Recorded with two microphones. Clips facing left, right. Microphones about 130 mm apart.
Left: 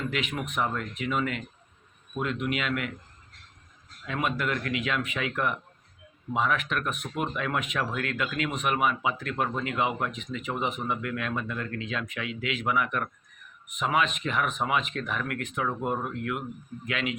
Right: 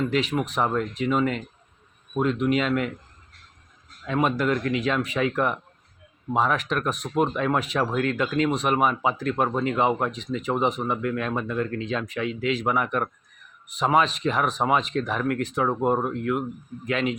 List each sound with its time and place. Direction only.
0.1 s speech: 35° right (ahead or behind)
4.0 s speech: 35° right (ahead or behind)